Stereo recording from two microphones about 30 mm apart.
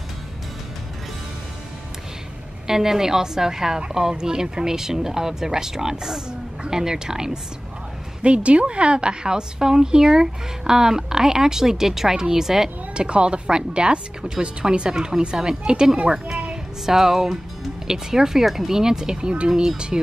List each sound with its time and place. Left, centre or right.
2.6 s a woman's voice: centre
8.2 s a woman's voice: right; by 12.7 s centre
12.9 s a woman's voice: right
16.8 s a woman's voice: centre
18.4 s speech: centre
18.7 s a woman's voice: centre